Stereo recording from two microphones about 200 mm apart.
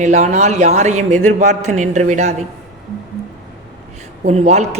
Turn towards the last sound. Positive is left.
turn(degrees=-35)  # may be behind; listen again after turning